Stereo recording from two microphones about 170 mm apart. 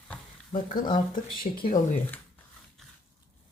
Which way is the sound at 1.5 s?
45° left (ahead or behind).